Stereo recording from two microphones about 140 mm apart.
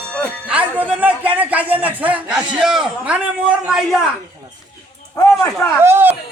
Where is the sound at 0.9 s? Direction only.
10° right (ahead or behind).